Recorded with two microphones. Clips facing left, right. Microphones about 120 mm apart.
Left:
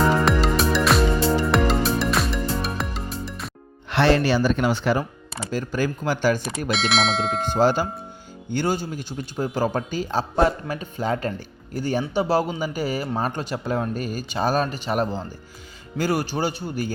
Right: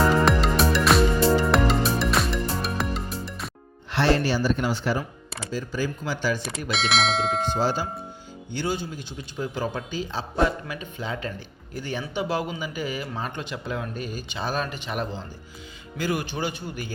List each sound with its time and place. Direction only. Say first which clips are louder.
0.3 s music: left 1 dB; centre (ahead or behind)
3.8 s speech: left 3 dB; 65° left (ahead or behind)
6.7 s speech: left 2 dB; centre (ahead or behind)
7.6 s speech: left 9 dB; 55° left (ahead or behind)
8.5 s a man's voice: left 4 dB; 45° left (ahead or behind)